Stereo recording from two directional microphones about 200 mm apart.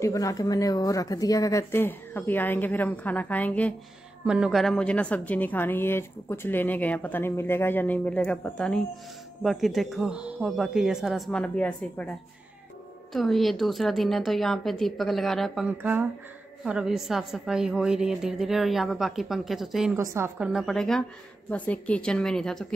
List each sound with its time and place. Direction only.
0.0 s a woman's voice: 15° left (ahead or behind)
4.3 s a woman's voice: 5° right (ahead or behind)
20.0 s a woman's voice: 15° right (ahead or behind)
20.3 s a woman's voice: 5° right (ahead or behind)